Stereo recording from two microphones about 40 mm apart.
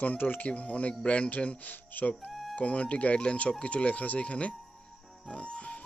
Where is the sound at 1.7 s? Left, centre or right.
Left.